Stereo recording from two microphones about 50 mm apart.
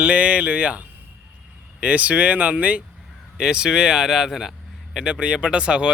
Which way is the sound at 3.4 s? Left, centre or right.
Centre.